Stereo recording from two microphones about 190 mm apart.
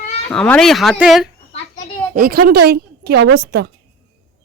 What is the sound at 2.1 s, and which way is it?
A woman's voice, 50° right (ahead or behind).